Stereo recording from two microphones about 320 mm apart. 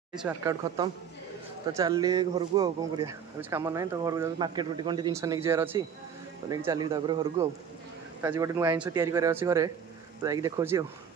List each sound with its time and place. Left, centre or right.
0.1 s speech: centre